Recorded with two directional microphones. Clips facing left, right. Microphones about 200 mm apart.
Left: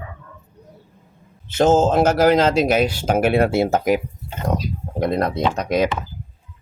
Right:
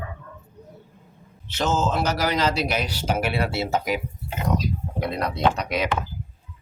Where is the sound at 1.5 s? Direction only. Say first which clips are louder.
Left 9 dB; 50° left (ahead or behind).